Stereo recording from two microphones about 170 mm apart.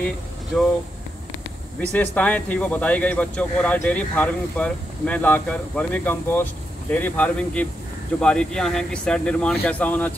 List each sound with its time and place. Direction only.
1.8 s speech: 10° left (ahead or behind)